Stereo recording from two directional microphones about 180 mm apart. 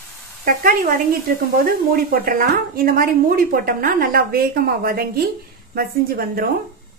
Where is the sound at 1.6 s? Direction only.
55° right (ahead or behind).